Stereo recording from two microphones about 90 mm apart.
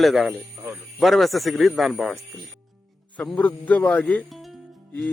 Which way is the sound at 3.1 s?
15° left (ahead or behind).